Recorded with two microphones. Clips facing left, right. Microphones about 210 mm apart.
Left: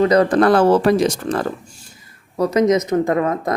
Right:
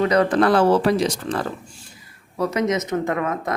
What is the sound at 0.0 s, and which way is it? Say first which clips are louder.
Speech: left 4 dB; 40° left (ahead or behind).